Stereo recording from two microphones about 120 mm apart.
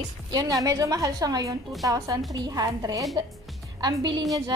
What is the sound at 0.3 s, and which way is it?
A woman's voice, 30° right (ahead or behind).